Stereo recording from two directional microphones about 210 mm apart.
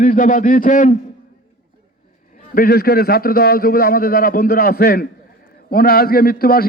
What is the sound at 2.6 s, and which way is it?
A man's voice, 45° left (ahead or behind).